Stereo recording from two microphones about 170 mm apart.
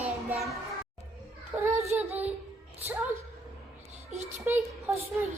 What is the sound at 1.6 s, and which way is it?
Child singing, 15° right (ahead or behind).